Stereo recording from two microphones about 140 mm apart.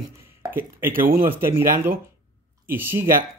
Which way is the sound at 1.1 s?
90° right.